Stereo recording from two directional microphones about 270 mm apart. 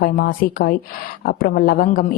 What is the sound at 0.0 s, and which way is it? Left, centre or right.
A woman's voice, left.